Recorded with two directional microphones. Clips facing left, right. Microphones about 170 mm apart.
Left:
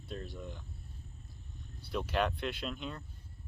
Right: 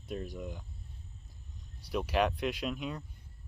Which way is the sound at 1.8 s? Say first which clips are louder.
Right 3 dB; 10° right (ahead or behind).